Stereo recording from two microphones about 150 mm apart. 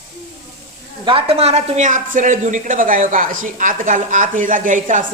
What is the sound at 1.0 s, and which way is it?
Speech, 35° right (ahead or behind).